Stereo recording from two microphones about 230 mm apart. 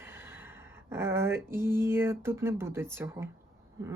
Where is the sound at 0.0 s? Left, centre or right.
Centre.